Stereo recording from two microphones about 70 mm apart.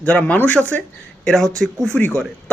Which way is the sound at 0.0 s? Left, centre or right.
Centre.